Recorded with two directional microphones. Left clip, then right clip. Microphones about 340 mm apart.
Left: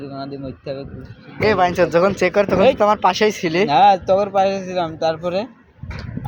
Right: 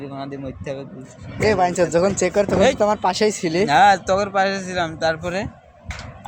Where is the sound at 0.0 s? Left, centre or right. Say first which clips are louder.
Left 1 dB; centre.